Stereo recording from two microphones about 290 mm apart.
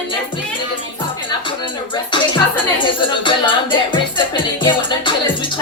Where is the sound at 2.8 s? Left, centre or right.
Centre.